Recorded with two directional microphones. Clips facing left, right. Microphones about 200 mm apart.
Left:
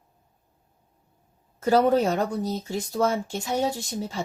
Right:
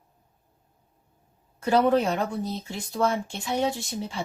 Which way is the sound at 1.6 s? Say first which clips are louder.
Left 1 dB; 40° left (ahead or behind).